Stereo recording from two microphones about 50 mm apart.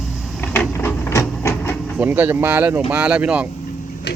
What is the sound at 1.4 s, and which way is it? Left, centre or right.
Vehicle, left.